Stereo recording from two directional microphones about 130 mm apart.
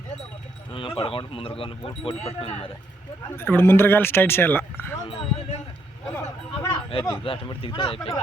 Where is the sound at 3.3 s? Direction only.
15° left (ahead or behind).